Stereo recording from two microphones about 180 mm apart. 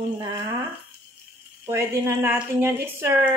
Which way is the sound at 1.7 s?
15° right (ahead or behind).